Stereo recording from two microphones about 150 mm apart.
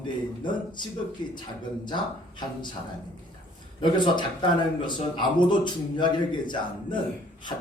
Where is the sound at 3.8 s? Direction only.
30° left (ahead or behind).